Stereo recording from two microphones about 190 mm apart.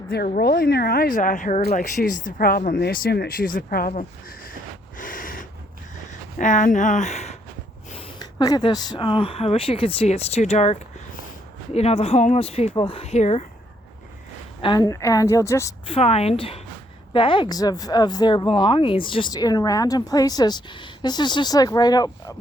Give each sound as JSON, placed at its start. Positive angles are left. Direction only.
{"t": 0.3, "sound": "speech", "side_deg": 55}
{"t": 4.9, "sound": "snort", "side_deg": 45}
{"t": 6.4, "sound": "speech", "side_deg": 40}
{"t": 7.9, "sound": "speech", "side_deg": 20}
{"t": 14.6, "sound": "a woman's voice", "side_deg": 20}
{"t": 15.9, "sound": "speech", "side_deg": 35}